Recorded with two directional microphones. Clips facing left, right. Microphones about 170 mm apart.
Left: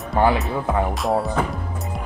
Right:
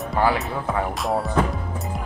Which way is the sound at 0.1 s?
20° left (ahead or behind).